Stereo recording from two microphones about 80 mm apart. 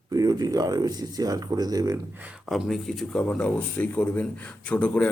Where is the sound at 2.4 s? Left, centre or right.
Centre.